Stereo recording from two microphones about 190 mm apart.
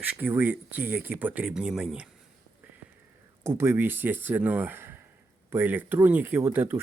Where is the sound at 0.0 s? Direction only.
10° right (ahead or behind).